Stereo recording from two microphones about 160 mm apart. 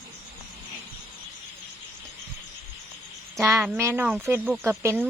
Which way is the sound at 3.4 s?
15° right (ahead or behind).